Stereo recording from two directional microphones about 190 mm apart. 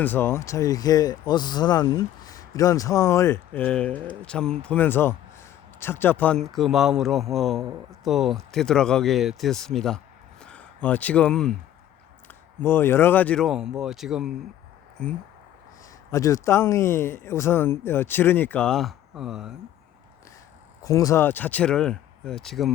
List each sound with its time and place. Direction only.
0.0 s speech: 10° left (ahead or behind)
16.1 s speech: 15° left (ahead or behind); by 19.5 s 5° right (ahead or behind)
20.8 s speech: 15° left (ahead or behind); by 22.7 s centre (ahead or behind)